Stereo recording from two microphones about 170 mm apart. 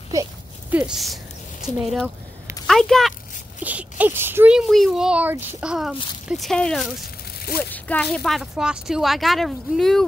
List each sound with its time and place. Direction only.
0.1 s a sound: 20° right (ahead or behind)
0.7 s speech: 5° right (ahead or behind)
3.6 s speech: 10° right (ahead or behind)